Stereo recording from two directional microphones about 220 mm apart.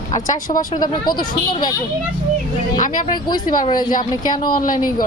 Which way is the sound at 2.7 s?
35° left (ahead or behind).